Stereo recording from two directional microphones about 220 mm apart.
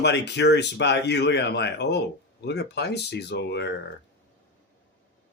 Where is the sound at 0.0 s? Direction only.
50° left (ahead or behind).